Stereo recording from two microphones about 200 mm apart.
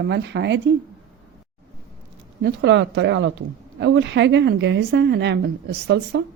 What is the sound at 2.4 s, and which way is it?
A woman's voice, 60° right (ahead or behind).